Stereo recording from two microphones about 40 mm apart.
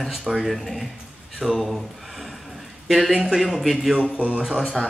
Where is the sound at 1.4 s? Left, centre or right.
Centre.